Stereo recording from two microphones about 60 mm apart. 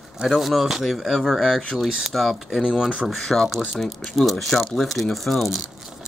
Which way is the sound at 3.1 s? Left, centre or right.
Centre.